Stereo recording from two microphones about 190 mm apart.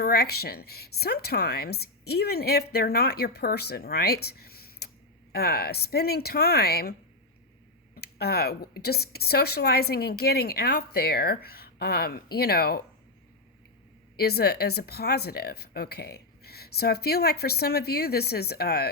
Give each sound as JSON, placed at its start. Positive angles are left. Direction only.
{"t": 0.0, "sound": "a woman's voice", "side_deg": 55}
{"t": 7.9, "sound": "a woman's voice", "side_deg": 55}
{"t": 14.2, "sound": "a woman's voice", "side_deg": 55}